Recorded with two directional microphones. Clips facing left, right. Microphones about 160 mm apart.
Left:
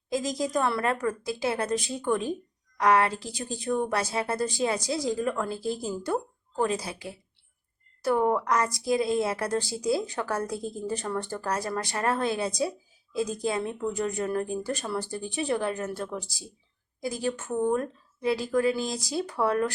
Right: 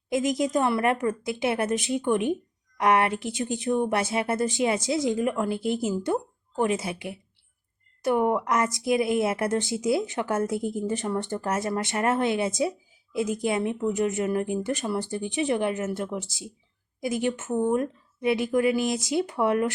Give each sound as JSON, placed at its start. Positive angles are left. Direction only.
{"t": 0.1, "sound": "speech", "side_deg": -20}